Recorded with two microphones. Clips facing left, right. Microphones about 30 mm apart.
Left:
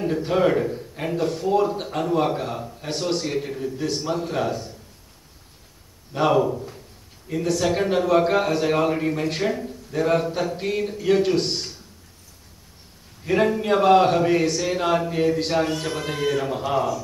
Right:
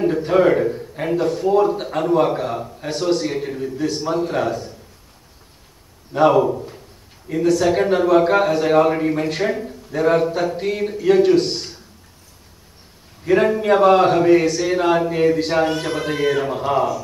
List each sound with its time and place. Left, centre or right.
0.0 s a man's voice: centre
6.1 s a man's voice: centre
13.2 s a man's voice: centre